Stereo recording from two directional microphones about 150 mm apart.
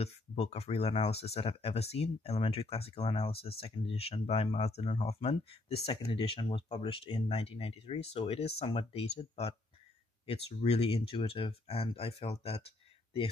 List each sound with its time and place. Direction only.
0.0 s speech: 45° left (ahead or behind)